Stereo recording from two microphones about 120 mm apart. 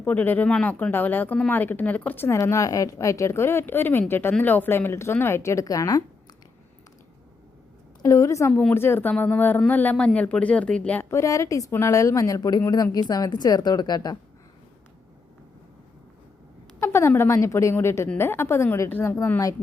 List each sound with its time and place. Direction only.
0.0 s speech: 15° left (ahead or behind); by 6.0 s 30° left (ahead or behind)
8.0 s speech: 25° left (ahead or behind)
11.1 s a woman's voice: 25° left (ahead or behind)
16.8 s speech: 20° left (ahead or behind)